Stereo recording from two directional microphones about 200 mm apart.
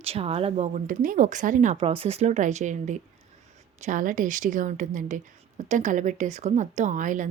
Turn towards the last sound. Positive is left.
turn(degrees=-40)  # may be behind; listen again after turning